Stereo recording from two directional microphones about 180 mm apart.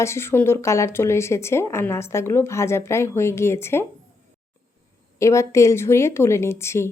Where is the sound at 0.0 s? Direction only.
15° left (ahead or behind).